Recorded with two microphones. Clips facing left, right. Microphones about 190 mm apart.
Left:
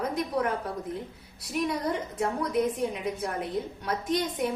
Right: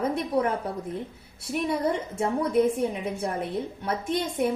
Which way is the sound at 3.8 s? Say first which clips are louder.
Even; 25° right (ahead or behind).